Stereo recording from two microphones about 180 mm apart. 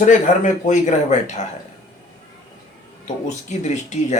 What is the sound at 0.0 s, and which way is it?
Speech, 45° left (ahead or behind).